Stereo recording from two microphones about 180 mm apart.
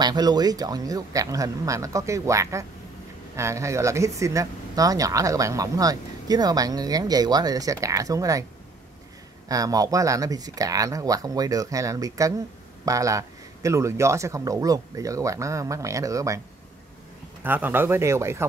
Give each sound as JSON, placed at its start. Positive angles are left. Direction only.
{"t": 0.0, "sound": "speech", "side_deg": -25}
{"t": 9.5, "sound": "speech", "side_deg": -20}
{"t": 17.4, "sound": "speech", "side_deg": -10}